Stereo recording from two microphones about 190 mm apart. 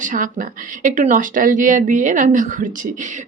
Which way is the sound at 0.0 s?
45° right (ahead or behind).